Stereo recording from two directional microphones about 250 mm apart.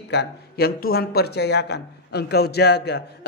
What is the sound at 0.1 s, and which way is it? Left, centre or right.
A man's voice, left.